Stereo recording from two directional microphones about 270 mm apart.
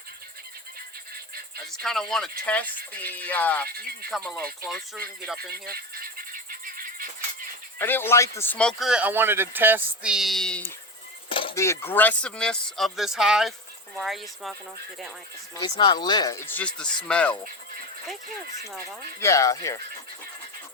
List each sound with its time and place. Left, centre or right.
1.8 s speech: centre
3.7 s speech: right
4.1 s speech: centre
5.6 s music: right
7.8 s speech: centre
11.3 s chopping: centre
12.7 s speech: centre
15.5 s speech: centre
19.2 s speech: centre